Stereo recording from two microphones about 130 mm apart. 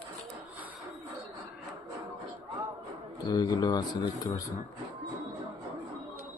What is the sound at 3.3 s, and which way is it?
Speech, 30° left (ahead or behind).